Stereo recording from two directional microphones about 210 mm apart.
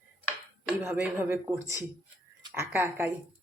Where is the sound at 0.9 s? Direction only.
10° right (ahead or behind).